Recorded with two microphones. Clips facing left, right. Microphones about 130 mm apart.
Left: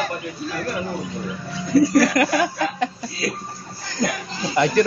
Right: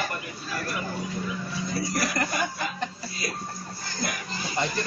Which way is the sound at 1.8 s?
70° left (ahead or behind).